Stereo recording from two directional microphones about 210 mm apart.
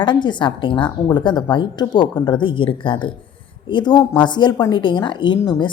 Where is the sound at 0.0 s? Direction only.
20° left (ahead or behind).